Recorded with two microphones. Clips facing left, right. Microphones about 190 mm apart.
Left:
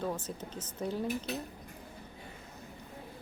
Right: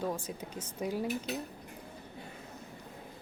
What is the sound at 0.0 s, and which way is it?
A woman's voice, 10° right (ahead or behind).